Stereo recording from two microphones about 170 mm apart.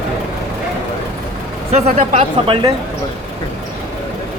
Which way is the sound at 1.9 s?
55° right (ahead or behind).